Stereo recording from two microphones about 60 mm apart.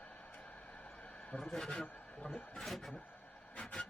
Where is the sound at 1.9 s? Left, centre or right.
Left.